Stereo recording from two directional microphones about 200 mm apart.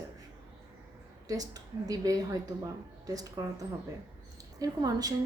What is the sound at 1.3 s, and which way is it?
A woman's voice, 20° right (ahead or behind).